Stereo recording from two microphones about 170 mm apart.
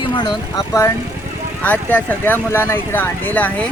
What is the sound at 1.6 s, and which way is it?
Speech, 10° left (ahead or behind).